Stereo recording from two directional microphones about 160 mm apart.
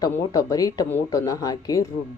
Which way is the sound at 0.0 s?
25° left (ahead or behind).